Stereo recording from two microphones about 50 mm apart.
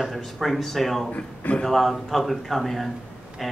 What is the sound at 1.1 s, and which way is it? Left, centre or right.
Speech, left.